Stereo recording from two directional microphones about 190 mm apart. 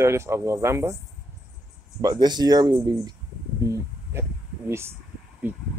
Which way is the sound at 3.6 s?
15° right (ahead or behind).